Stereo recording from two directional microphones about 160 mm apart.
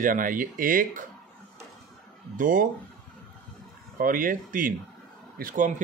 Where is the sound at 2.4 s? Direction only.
55° right (ahead or behind).